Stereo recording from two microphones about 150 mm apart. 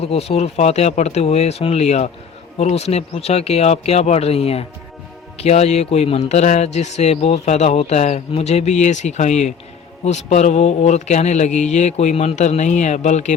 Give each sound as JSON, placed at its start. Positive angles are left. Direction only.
{"t": 0.0, "sound": "a man's voice", "side_deg": 45}